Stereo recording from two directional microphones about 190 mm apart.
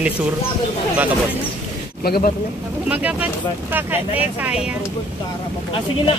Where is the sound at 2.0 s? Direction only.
55° left (ahead or behind).